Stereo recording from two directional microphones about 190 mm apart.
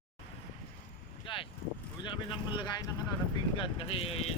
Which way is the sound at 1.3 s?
25° left (ahead or behind).